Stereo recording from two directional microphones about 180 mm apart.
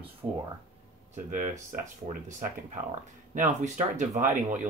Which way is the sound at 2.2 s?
45° right (ahead or behind).